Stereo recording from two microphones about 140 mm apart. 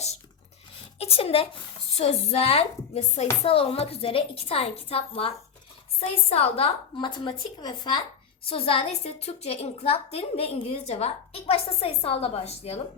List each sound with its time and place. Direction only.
0.9 s a woman's voice: 45° left (ahead or behind)